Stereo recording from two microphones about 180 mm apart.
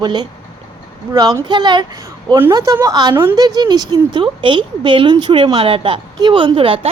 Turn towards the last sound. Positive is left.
turn(degrees=-30)  # may be behind; listen again after turning